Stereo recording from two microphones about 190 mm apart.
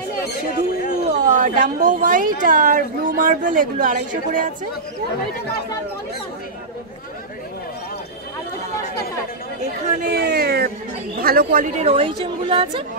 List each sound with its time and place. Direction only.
1.0 s speech: 45° right (ahead or behind)
9.6 s speech: 45° right (ahead or behind)
11.9 s speech: 30° right (ahead or behind)